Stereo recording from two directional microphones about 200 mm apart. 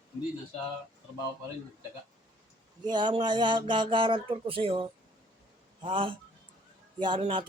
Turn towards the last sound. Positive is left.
turn(degrees=-25)  # may be behind; listen again after turning